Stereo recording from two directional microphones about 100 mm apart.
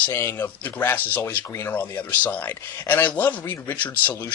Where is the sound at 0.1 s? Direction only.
20° left (ahead or behind).